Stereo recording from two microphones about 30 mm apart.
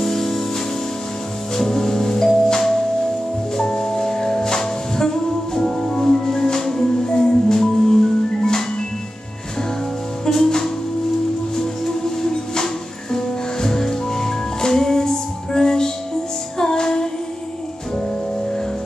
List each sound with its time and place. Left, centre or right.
0.0 s music: centre
1.6 s music: centre
10.4 s music: centre